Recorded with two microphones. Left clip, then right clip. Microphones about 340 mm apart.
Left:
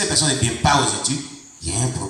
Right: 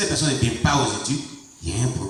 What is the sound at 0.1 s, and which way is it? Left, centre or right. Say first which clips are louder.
A man's voice: left 3 dB; centre.